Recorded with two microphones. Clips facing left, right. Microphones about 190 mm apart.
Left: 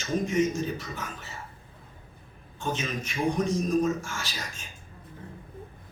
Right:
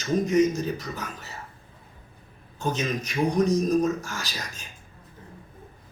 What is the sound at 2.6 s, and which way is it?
A man's voice, 40° right (ahead or behind).